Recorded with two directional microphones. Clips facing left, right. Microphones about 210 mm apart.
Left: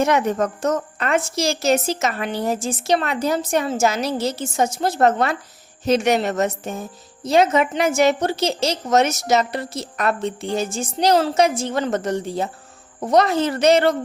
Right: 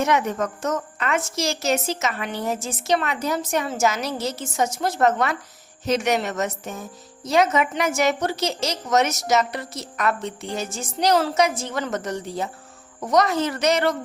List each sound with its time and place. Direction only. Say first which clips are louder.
0.0 s a woman's voice: left 3 dB; 35° left (ahead or behind)